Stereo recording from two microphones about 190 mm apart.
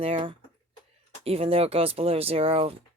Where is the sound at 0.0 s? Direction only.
30° right (ahead or behind).